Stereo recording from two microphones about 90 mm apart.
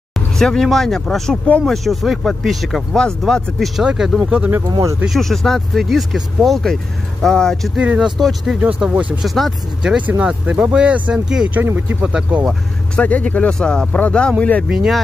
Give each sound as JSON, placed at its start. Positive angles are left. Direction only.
{"t": 0.1, "sound": "speech", "side_deg": 5}
{"t": 3.8, "sound": "speech", "side_deg": -10}
{"t": 4.6, "sound": "speech", "side_deg": -45}
{"t": 5.0, "sound": "speech", "side_deg": 0}
{"t": 7.8, "sound": "speech", "side_deg": -15}
{"t": 8.2, "sound": "speech", "side_deg": 0}
{"t": 8.5, "sound": "speech", "side_deg": -15}
{"t": 9.2, "sound": "speech", "side_deg": 0}
{"t": 9.9, "sound": "speech", "side_deg": -15}
{"t": 12.0, "sound": "speech", "side_deg": -10}
{"t": 12.9, "sound": "speech", "side_deg": 15}
{"t": 14.7, "sound": "speech", "side_deg": -5}